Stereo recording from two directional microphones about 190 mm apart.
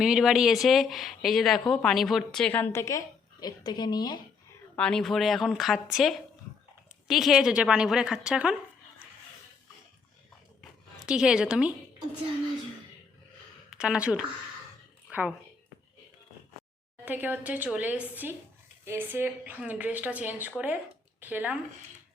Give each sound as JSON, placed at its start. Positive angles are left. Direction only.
{"t": 0.0, "sound": "speech", "side_deg": -5}
{"t": 4.8, "sound": "speech", "side_deg": 5}
{"t": 10.6, "sound": "a sound", "side_deg": -5}
{"t": 13.7, "sound": "speech", "side_deg": -5}
{"t": 15.0, "sound": "a sound", "side_deg": -10}
{"t": 17.1, "sound": "a woman's voice", "side_deg": -10}